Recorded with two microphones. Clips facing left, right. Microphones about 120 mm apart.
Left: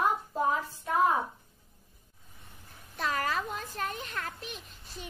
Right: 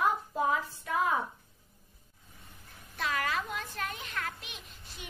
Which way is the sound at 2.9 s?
40° left (ahead or behind).